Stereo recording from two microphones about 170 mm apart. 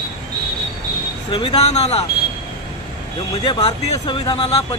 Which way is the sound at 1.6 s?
40° left (ahead or behind).